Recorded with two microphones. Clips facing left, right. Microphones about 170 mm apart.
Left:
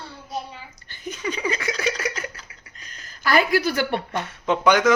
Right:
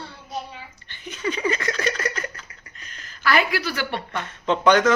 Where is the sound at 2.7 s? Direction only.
35° left (ahead or behind).